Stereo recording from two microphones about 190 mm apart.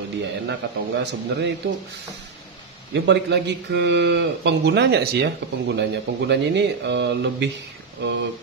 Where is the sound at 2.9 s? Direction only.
65° right (ahead or behind).